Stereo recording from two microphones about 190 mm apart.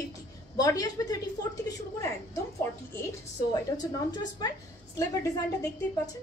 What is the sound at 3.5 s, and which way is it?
A woman's voice, 20° left (ahead or behind).